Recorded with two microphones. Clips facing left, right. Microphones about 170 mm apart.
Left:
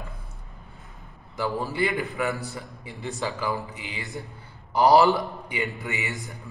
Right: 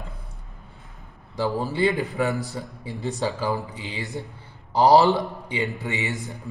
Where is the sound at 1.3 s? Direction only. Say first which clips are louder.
Right 3 dB; 30° right (ahead or behind).